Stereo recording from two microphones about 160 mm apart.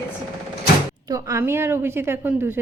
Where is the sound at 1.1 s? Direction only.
20° right (ahead or behind).